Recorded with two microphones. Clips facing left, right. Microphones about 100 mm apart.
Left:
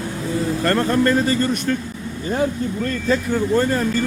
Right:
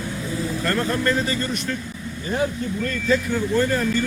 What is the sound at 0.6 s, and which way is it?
Speech, 60° left (ahead or behind).